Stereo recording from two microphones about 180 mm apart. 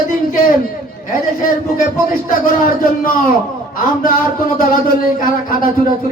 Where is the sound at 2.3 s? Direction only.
50° left (ahead or behind).